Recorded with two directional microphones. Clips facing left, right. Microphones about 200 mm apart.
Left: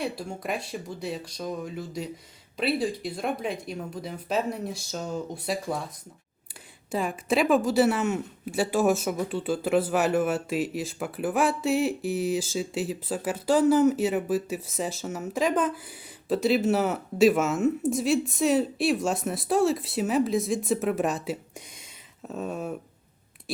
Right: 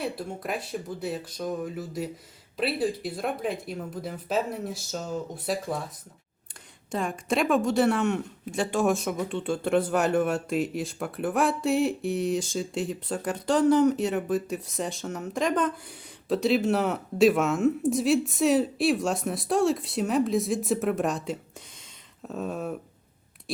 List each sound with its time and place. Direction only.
0.0 s speech: centre (ahead or behind)
6.9 s speech: 5° left (ahead or behind)